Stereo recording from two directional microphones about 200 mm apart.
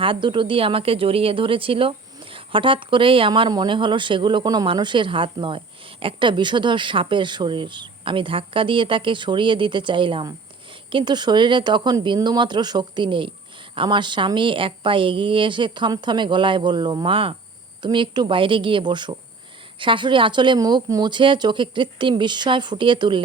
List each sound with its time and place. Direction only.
0.0 s speech: 25° right (ahead or behind)